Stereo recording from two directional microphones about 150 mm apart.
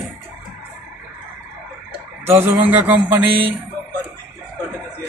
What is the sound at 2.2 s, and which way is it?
Speech, 15° right (ahead or behind).